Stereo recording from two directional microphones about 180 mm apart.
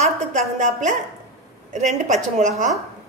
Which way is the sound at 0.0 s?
45° right (ahead or behind).